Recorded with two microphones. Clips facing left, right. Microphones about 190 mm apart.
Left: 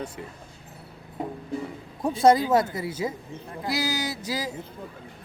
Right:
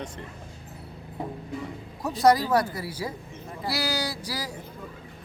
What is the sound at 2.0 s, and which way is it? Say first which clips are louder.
Speech: left 2 dB; 25° left (ahead or behind).